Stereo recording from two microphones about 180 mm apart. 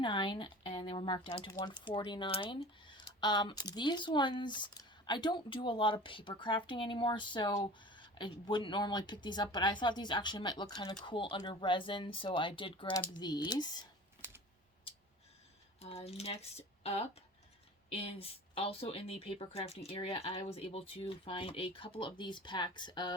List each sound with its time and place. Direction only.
0.0 s speech: 25° left (ahead or behind)
15.8 s speech: 35° left (ahead or behind)